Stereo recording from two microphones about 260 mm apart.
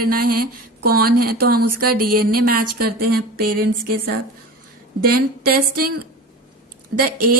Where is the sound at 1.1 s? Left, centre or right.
Right.